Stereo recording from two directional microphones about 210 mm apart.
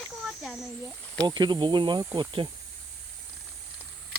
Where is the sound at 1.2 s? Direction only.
20° right (ahead or behind).